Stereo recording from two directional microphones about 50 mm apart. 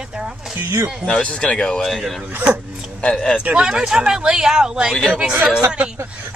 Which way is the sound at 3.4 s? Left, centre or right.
Right.